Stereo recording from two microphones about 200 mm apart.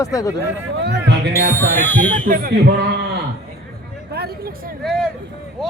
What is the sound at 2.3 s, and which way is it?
Music, 50° right (ahead or behind).